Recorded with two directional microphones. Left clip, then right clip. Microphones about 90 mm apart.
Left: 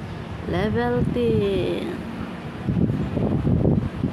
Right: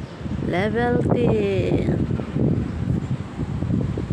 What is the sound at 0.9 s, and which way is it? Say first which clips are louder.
Speech: right 2 dB; 65° right (ahead or behind).